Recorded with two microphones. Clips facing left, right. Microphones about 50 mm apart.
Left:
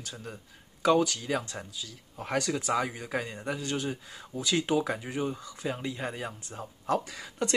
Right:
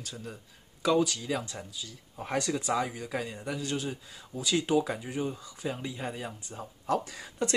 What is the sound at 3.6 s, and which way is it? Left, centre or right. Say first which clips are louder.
A man's voice: left 1 dB; left.